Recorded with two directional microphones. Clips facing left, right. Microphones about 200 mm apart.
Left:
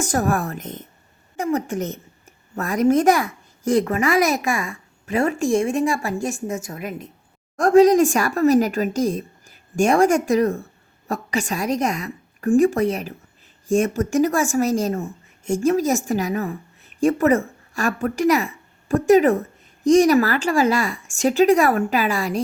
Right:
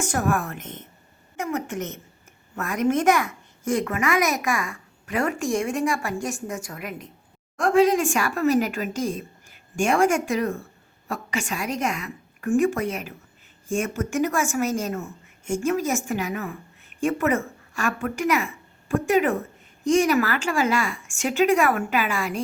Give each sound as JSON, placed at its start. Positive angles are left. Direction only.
{"t": 0.0, "sound": "a woman's voice", "side_deg": 40}
{"t": 7.5, "sound": "speech", "side_deg": 40}